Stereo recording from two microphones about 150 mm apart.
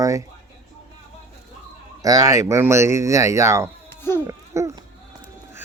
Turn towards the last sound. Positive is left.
turn(degrees=-20)  # may be behind; listen again after turning